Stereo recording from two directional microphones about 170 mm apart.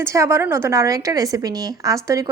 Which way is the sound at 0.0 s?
15° right (ahead or behind).